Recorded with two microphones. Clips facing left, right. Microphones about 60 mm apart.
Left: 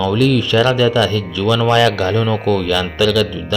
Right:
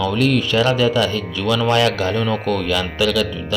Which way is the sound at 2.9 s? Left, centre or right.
Left.